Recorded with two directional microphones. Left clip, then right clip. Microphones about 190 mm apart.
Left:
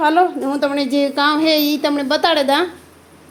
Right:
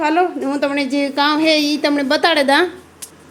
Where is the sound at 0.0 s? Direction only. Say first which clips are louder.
Left 2 dB; 10° left (ahead or behind).